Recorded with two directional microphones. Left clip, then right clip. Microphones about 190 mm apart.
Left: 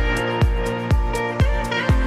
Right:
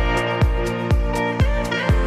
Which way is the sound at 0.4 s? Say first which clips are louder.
Right 1 dB; centre (ahead or behind).